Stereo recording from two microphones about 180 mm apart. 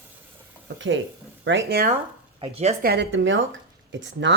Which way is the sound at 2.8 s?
80° right.